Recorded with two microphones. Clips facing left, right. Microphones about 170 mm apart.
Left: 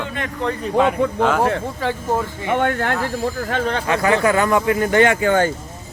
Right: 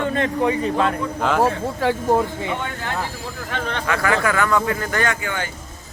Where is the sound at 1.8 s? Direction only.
15° right (ahead or behind).